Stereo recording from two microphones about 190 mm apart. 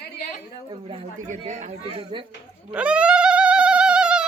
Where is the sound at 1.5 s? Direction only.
40° right (ahead or behind).